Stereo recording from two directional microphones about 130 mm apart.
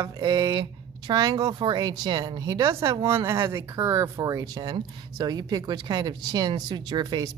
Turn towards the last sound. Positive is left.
turn(degrees=-30)  # may be behind; listen again after turning